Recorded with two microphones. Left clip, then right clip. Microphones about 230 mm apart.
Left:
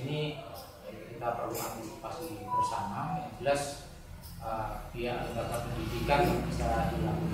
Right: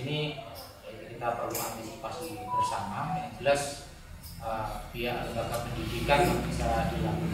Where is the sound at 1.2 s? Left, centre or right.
Centre.